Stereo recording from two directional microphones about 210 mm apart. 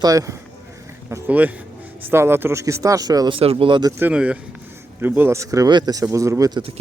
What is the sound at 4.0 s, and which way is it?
Speech, 5° right (ahead or behind).